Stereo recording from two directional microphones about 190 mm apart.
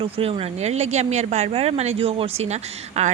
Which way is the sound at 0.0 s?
30° right (ahead or behind).